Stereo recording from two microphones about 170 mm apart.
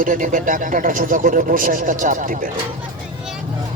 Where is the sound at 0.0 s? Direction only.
50° right (ahead or behind).